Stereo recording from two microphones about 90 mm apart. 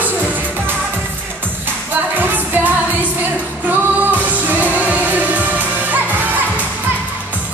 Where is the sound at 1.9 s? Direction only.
20° right (ahead or behind).